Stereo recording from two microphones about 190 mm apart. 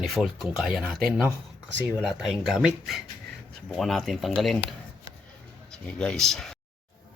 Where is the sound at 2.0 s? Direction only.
Centre (ahead or behind).